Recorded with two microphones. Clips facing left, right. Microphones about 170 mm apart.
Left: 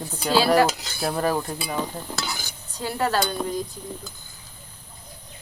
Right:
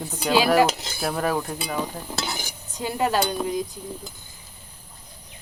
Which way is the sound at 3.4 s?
10° right (ahead or behind).